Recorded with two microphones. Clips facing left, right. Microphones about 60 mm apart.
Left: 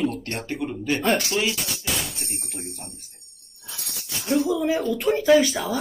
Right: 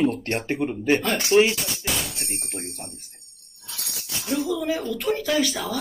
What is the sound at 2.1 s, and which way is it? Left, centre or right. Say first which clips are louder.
Speech: right 2 dB; right.